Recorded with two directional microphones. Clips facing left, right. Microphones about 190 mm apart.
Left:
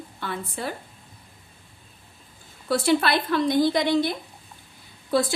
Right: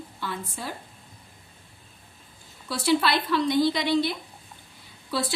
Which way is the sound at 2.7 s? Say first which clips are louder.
Left 2 dB; 55° left (ahead or behind).